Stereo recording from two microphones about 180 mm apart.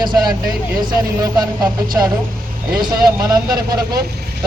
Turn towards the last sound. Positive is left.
turn(degrees=-20)  # may be behind; listen again after turning